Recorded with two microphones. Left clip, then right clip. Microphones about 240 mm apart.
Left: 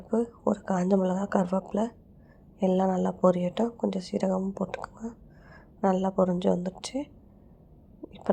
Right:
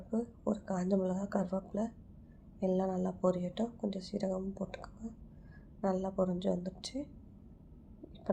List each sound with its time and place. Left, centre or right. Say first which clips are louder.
0.1 s speech: left 10 dB; left